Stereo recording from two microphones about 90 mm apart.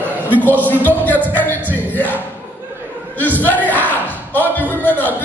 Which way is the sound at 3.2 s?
20° left (ahead or behind).